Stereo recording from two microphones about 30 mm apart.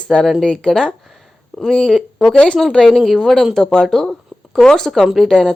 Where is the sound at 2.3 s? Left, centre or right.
Left.